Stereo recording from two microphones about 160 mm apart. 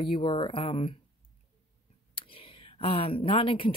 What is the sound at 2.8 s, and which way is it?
Speech, 35° left (ahead or behind).